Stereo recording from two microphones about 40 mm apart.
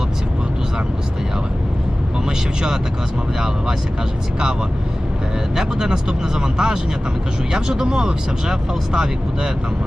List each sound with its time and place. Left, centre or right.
5.5 s speech: centre